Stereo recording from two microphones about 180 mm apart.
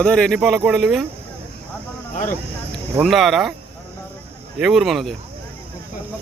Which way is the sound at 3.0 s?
Centre (ahead or behind).